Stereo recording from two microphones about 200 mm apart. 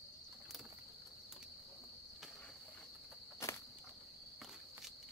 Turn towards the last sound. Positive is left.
turn(degrees=15)  # may be behind; listen again after turning